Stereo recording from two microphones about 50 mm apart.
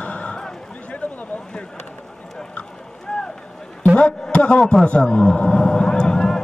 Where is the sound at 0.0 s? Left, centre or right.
Left.